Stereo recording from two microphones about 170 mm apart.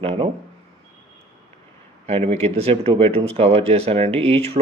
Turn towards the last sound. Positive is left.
turn(degrees=-35)  # may be behind; listen again after turning